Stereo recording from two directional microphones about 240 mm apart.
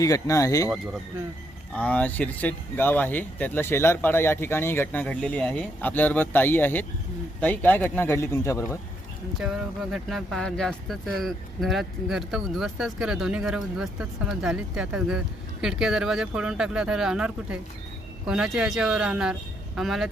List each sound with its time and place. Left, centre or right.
0.0 s speech: centre
1.7 s speech: centre
9.4 s speech: centre